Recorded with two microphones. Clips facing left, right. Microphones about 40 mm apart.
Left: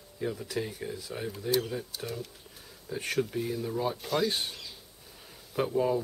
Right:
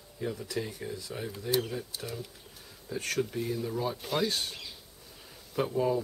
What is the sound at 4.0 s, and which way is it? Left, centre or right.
Speech, centre.